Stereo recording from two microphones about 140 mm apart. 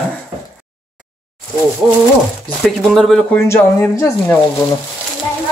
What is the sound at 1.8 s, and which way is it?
Bird, 10° right (ahead or behind).